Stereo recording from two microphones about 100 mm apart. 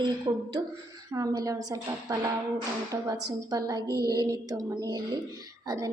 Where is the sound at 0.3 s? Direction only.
35° right (ahead or behind).